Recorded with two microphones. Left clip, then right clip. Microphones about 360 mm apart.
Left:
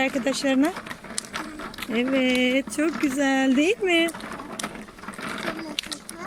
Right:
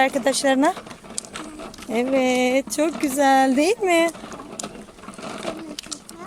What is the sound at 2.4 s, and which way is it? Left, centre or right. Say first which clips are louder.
Speech: right 3 dB; centre.